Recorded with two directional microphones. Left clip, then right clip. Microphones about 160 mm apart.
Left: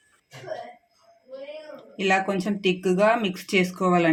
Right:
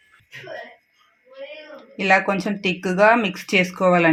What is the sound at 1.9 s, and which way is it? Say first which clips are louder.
Speech: right 5 dB; 35° right (ahead or behind).